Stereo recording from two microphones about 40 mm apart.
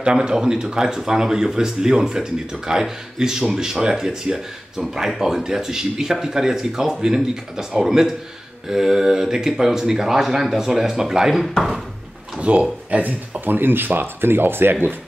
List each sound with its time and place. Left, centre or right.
0.0 s speech: right
11.4 s speech: centre
12.4 s speech: right
13.5 s speech: right